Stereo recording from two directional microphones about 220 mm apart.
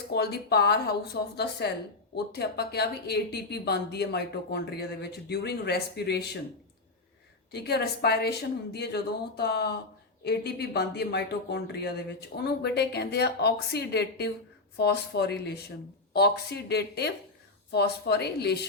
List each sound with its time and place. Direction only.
0.1 s speech: 45° left (ahead or behind)
7.5 s speech: 50° left (ahead or behind)